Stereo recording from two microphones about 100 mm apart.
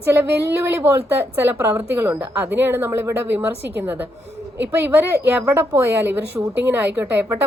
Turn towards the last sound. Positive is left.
turn(degrees=-20)  # may be behind; listen again after turning